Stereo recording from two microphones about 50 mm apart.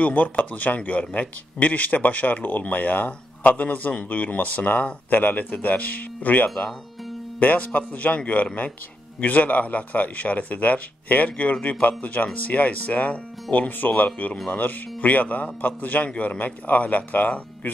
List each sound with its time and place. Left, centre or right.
0.0 s speech: left
9.2 s speech: left